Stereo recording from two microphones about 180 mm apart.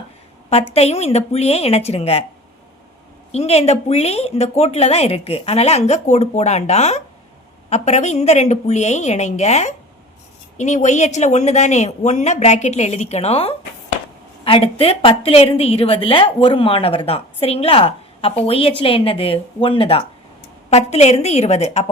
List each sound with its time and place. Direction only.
0.5 s a woman's voice: 35° left (ahead or behind)
3.3 s a woman's voice: 35° left (ahead or behind)